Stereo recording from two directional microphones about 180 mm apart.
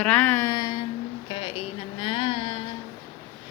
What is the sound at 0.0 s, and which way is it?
Speech, 5° left (ahead or behind).